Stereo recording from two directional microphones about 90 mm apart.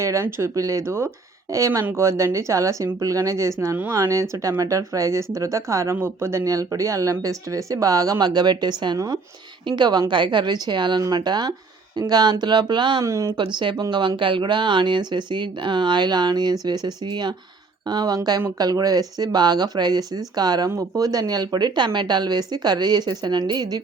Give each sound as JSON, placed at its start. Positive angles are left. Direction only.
{"t": 0.0, "sound": "speech", "side_deg": -35}
{"t": 1.8, "sound": "speech", "side_deg": -25}
{"t": 2.0, "sound": "speech", "side_deg": -35}
{"t": 13.1, "sound": "speech", "side_deg": -35}
{"t": 13.6, "sound": "speech", "side_deg": -60}